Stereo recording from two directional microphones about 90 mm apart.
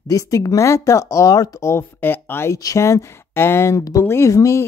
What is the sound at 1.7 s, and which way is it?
Speech, 25° left (ahead or behind).